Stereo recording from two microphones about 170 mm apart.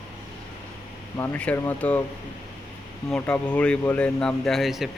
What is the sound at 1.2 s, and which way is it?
Speech, 10° left (ahead or behind).